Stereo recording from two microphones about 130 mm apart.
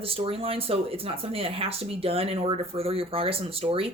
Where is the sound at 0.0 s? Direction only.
45° right (ahead or behind).